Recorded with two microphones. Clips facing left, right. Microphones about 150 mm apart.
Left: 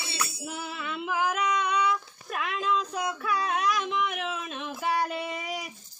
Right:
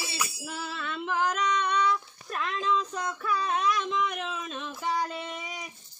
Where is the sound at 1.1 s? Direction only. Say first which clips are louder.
Even; 10° left (ahead or behind).